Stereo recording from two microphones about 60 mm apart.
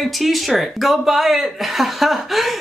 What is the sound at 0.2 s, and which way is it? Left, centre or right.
Speech, centre.